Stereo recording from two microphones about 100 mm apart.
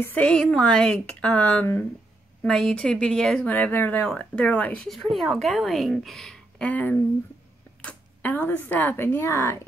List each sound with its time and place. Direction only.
0.0 s speech: 15° left (ahead or behind)
2.4 s speech: 5° left (ahead or behind)
5.1 s a woman's voice: centre (ahead or behind); by 9.6 s 25° left (ahead or behind)